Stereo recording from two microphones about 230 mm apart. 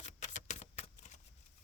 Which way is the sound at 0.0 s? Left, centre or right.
Left.